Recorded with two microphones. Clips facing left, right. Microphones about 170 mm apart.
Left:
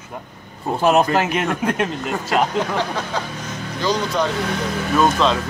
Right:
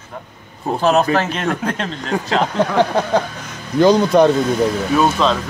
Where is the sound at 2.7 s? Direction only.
55° right (ahead or behind).